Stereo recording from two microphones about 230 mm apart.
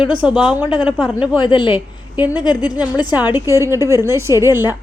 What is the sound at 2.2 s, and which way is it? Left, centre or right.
A woman's voice, centre.